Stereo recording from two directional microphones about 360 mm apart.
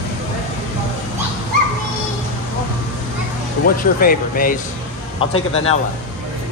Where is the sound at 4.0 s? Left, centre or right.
Left.